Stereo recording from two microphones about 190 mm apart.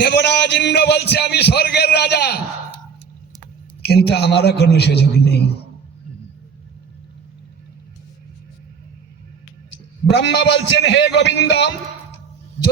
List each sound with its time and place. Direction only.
0.0 s a man's voice: 60° left (ahead or behind)
3.8 s a man's voice: 60° left (ahead or behind)
10.1 s a man's voice: 70° left (ahead or behind)